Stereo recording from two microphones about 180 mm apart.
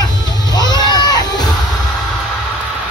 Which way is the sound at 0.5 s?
25° left (ahead or behind).